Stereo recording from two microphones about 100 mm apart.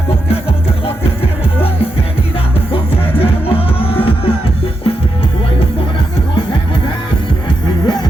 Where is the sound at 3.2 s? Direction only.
70° left (ahead or behind).